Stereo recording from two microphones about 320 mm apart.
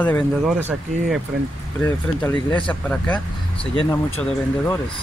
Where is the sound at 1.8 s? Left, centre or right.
Centre.